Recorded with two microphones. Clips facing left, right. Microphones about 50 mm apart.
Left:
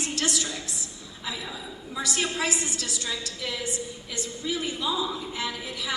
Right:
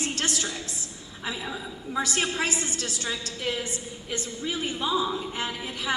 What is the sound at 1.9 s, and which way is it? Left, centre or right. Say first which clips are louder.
A woman's voice: right 2 dB; right.